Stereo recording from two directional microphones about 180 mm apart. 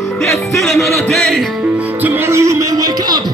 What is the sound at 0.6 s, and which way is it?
Music, centre (ahead or behind).